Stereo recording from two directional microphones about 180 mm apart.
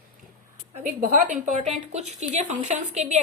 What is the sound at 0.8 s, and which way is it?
A woman's voice, 45° right (ahead or behind).